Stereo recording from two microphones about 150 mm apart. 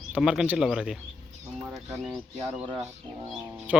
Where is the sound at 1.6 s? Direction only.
20° right (ahead or behind).